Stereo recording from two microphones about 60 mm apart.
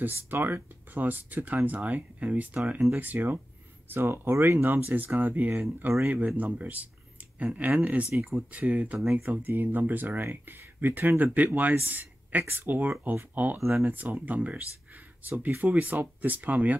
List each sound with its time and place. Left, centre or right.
0.0 s speech: right
4.6 s speech: right
6.2 s speech: right